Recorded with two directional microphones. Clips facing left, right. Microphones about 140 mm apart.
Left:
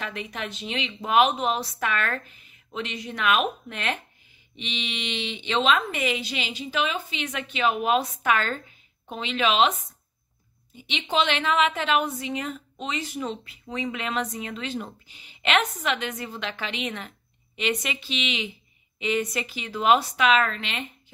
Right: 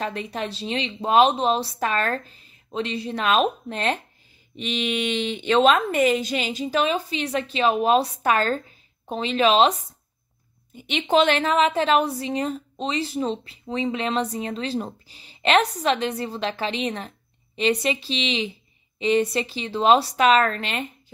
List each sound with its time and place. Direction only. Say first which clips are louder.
0.0 s a woman's voice: right 5 dB; 35° right (ahead or behind)
4.6 s a woman's voice: right 9 dB; 45° right (ahead or behind)
10.7 s a woman's voice: right 7 dB; 50° right (ahead or behind)